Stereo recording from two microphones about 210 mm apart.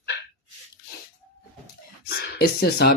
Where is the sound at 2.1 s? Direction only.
45° left (ahead or behind).